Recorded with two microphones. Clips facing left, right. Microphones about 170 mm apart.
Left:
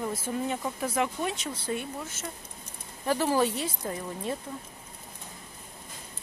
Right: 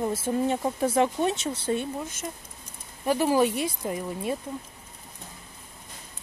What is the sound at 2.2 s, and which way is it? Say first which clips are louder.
Speech: right 3 dB; 15° right (ahead or behind).